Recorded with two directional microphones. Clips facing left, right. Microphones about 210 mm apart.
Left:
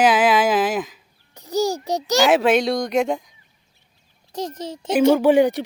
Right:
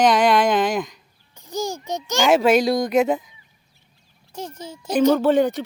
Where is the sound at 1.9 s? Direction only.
35° left (ahead or behind).